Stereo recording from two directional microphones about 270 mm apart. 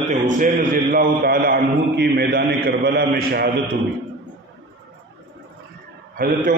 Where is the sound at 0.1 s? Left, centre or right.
Right.